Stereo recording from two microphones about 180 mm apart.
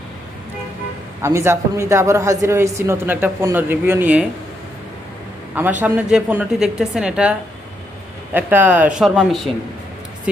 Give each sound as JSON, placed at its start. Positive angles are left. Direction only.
{"t": 1.2, "sound": "a man's voice", "side_deg": -15}
{"t": 5.8, "sound": "a woman's voice", "side_deg": -5}